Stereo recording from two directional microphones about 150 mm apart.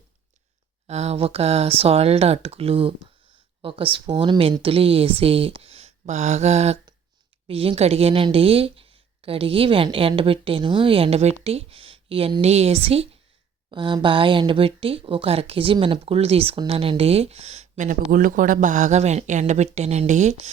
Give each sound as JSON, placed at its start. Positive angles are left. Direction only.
{"t": 0.9, "sound": "a woman's voice", "side_deg": -45}
{"t": 18.1, "sound": "speech", "side_deg": -65}